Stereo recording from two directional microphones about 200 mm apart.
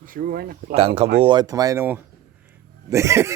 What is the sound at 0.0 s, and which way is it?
Speech, 45° right (ahead or behind).